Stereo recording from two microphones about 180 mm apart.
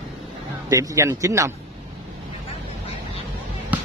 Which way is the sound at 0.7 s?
15° right (ahead or behind).